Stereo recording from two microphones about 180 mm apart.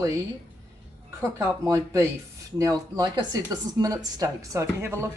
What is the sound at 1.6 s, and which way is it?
Speech, 15° right (ahead or behind).